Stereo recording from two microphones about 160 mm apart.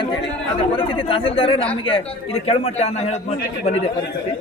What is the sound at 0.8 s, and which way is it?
Speech, 35° left (ahead or behind).